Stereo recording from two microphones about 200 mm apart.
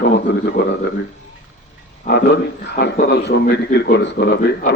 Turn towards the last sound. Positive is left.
turn(degrees=55)  # may be behind; listen again after turning